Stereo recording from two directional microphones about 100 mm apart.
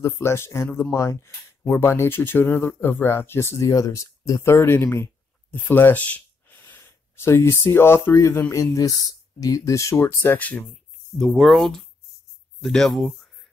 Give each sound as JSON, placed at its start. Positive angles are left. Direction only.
{"t": 0.0, "sound": "speech", "side_deg": 25}
{"t": 11.1, "sound": "speech", "side_deg": 0}